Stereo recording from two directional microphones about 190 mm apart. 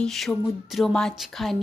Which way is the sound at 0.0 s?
5° left (ahead or behind).